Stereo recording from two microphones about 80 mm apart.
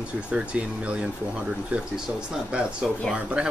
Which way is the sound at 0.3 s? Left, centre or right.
Centre.